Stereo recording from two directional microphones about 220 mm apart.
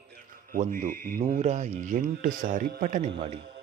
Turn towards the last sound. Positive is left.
turn(degrees=-25)  # may be behind; listen again after turning